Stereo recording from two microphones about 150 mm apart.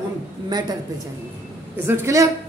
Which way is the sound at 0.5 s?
30° right (ahead or behind).